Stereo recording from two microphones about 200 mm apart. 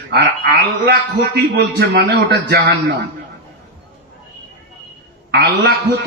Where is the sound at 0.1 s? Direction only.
55° right (ahead or behind).